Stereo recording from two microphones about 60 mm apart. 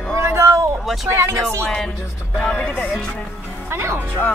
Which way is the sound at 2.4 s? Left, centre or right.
Centre.